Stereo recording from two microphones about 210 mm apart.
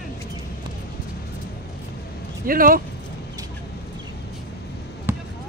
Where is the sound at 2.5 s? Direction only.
45° right (ahead or behind).